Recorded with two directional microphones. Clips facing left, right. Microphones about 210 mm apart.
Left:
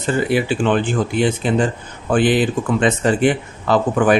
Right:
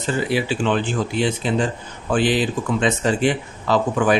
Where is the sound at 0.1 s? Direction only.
55° left (ahead or behind).